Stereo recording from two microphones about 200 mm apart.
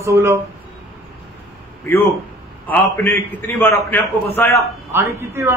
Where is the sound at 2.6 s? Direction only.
10° left (ahead or behind).